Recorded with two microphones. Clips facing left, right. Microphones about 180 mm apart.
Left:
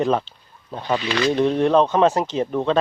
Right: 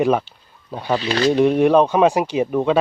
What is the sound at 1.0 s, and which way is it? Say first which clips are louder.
Speech: right 2 dB; 35° right (ahead or behind).